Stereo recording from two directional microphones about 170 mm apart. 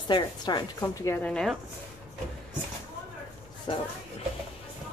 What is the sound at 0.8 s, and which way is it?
Speech, 15° left (ahead or behind).